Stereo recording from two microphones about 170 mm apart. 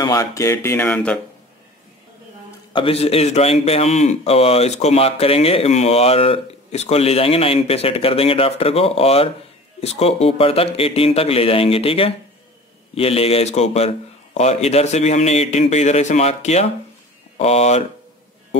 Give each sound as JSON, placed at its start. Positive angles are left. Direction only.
{"t": 0.0, "sound": "speech", "side_deg": 20}
{"t": 2.7, "sound": "a man's voice", "side_deg": 35}